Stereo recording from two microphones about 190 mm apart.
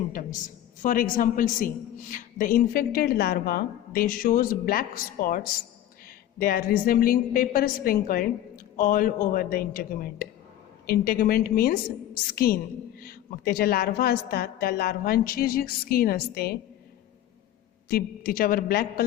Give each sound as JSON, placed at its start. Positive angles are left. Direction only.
{"t": 0.1, "sound": "a woman's voice", "side_deg": 45}
{"t": 6.4, "sound": "a woman's voice", "side_deg": 50}
{"t": 17.8, "sound": "a woman's voice", "side_deg": 50}